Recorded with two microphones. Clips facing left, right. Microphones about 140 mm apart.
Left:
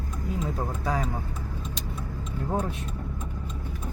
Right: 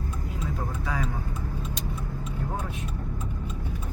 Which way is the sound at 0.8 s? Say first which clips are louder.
Left 4 dB; 40° left (ahead or behind).